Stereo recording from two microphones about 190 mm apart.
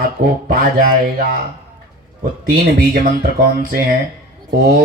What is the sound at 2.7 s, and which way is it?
Speech, 50° right (ahead or behind).